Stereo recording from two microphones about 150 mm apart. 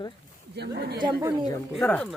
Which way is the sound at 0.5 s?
90° right.